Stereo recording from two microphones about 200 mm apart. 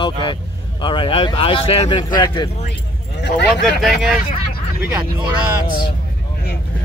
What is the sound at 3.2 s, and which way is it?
Speech, 60° left (ahead or behind).